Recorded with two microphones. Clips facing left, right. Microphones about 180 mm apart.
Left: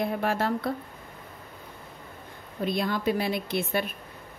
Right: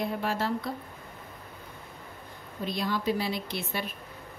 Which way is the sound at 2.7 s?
55° left (ahead or behind).